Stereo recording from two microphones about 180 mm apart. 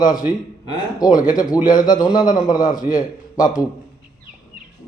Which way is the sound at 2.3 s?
45° left (ahead or behind).